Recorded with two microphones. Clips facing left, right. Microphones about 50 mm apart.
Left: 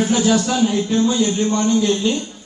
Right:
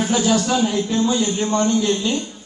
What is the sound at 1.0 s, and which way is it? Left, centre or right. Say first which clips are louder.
Speech: left 2 dB; right.